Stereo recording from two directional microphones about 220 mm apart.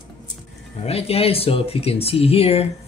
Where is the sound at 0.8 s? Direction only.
25° left (ahead or behind).